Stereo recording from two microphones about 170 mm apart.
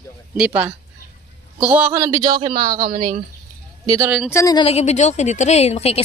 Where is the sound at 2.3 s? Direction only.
55° right (ahead or behind).